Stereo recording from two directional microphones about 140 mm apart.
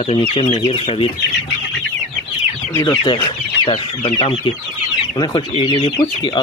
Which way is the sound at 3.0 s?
35° left (ahead or behind).